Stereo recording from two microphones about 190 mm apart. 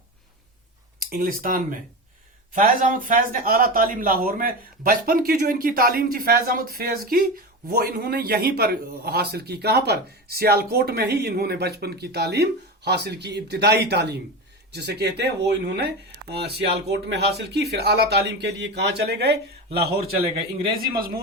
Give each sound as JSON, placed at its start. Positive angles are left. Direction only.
{"t": 0.9, "sound": "a man's voice", "side_deg": -50}